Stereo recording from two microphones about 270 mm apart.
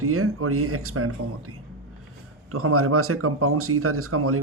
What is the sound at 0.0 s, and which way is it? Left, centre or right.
Speech, right.